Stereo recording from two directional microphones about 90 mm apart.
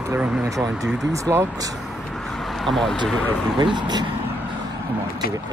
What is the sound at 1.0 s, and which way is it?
Speech, 35° right (ahead or behind).